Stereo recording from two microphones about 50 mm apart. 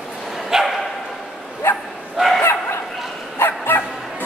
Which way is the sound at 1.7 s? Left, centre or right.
Left.